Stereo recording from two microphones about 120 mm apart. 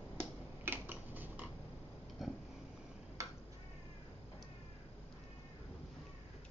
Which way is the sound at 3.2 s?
25° right (ahead or behind).